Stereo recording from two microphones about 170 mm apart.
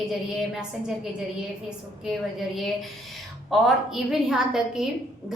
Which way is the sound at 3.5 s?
Centre (ahead or behind).